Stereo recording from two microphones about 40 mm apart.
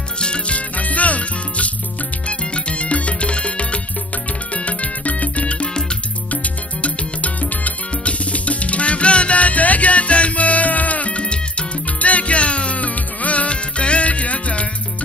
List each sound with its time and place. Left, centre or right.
0.2 s music: left